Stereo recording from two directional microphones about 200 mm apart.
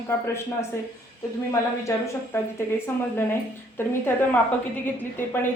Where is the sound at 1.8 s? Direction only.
15° left (ahead or behind).